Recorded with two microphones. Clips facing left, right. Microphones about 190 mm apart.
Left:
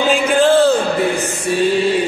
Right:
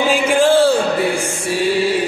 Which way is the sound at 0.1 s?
10° right (ahead or behind).